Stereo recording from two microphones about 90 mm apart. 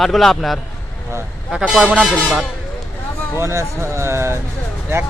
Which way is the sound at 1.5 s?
10° right (ahead or behind).